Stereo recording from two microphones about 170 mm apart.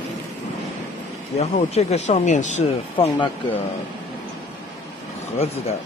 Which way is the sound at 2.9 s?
30° left (ahead or behind).